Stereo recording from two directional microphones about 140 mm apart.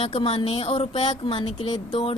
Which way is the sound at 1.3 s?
35° left (ahead or behind).